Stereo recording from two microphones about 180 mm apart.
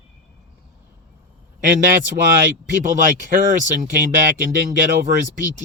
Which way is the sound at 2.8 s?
45° right (ahead or behind).